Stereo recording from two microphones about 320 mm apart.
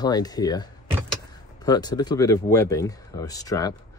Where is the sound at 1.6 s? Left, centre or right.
Centre.